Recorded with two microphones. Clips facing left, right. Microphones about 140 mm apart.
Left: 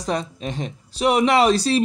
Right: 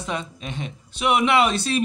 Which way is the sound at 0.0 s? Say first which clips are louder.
Left 5 dB; 35° left (ahead or behind).